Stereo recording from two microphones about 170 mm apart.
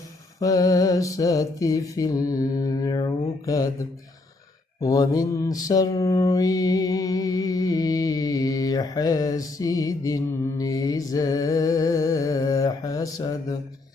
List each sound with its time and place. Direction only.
0.3 s music: 20° left (ahead or behind)
10.6 s mantra: 20° left (ahead or behind)